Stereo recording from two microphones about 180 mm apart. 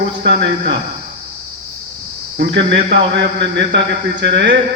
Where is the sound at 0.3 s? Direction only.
75° right (ahead or behind).